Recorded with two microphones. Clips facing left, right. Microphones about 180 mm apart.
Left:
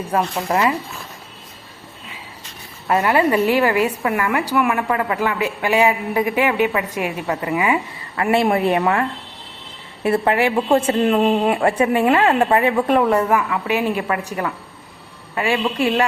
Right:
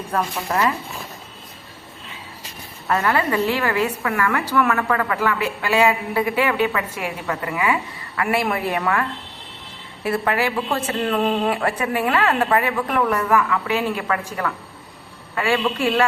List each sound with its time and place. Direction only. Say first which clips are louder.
0.5 s a woman's voice: left 2 dB; 15° left (ahead or behind)
2.8 s a woman's voice: left 4 dB; 15° left (ahead or behind)